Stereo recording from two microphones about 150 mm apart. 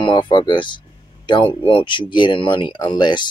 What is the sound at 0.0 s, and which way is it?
Speech, 30° left (ahead or behind).